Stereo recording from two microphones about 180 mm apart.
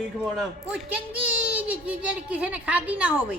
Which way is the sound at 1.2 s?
10° right (ahead or behind).